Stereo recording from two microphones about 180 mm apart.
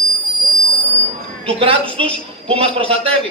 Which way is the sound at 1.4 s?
30° right (ahead or behind).